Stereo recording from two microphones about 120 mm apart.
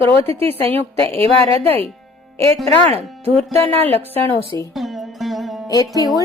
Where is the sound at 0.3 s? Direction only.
20° left (ahead or behind).